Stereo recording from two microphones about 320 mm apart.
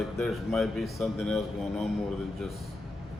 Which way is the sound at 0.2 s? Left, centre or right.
Centre.